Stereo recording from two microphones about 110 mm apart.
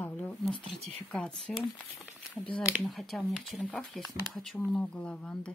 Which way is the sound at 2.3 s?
15° left (ahead or behind).